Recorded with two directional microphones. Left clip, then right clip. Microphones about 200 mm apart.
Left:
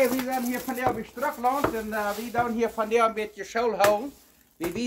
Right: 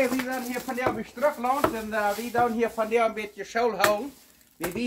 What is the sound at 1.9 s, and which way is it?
Speech, 10° left (ahead or behind).